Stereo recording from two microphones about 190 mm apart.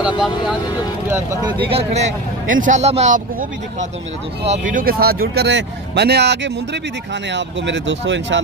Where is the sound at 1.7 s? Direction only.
35° right (ahead or behind).